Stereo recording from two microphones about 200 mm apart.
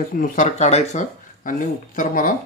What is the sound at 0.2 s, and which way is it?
Speech, 35° left (ahead or behind).